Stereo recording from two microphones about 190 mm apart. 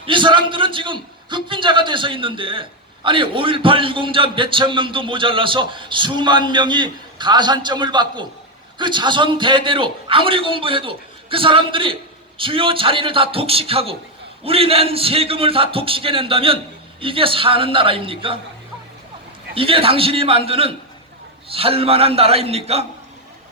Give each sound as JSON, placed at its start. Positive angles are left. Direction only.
{"t": 0.0, "sound": "a man's voice", "side_deg": -25}
{"t": 19.5, "sound": "a man's voice", "side_deg": -30}